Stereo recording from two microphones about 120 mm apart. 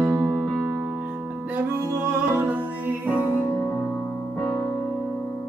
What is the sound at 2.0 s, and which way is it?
Music, 20° right (ahead or behind).